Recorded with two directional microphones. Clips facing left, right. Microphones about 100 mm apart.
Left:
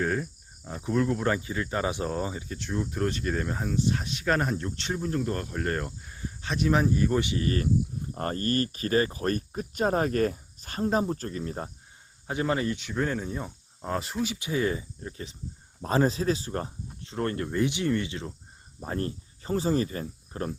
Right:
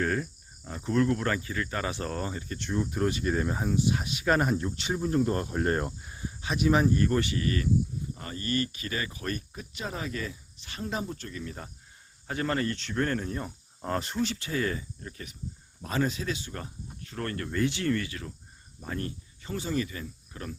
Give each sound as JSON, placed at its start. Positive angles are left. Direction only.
{"t": 0.0, "sound": "cricket", "side_deg": 5}
{"t": 7.3, "sound": "speech", "side_deg": 30}
{"t": 8.1, "sound": "speech", "side_deg": 50}
{"t": 12.3, "sound": "speech", "side_deg": 15}
{"t": 17.0, "sound": "speech", "side_deg": 25}
{"t": 18.8, "sound": "speech", "side_deg": 35}